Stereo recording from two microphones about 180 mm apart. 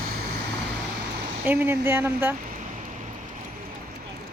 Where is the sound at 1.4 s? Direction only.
10° right (ahead or behind).